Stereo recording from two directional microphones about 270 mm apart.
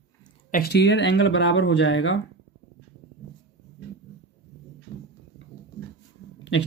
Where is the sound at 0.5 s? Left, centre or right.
Left.